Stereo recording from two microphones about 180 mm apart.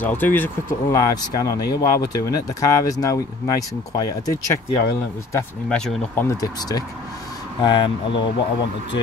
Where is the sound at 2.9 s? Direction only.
20° left (ahead or behind).